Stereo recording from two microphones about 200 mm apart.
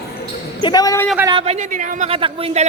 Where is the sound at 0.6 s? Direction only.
20° left (ahead or behind).